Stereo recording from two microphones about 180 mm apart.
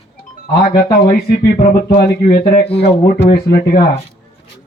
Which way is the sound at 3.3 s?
55° left (ahead or behind).